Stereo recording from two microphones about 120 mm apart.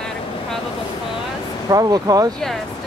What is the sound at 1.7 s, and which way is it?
Speech, 30° right (ahead or behind).